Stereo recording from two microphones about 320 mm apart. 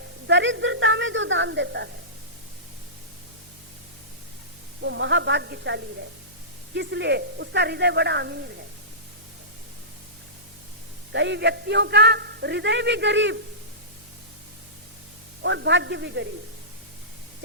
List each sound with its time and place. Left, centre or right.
0.3 s a sound: right
4.8 s a man's voice: right
11.1 s a man's voice: right
15.4 s a man's voice: right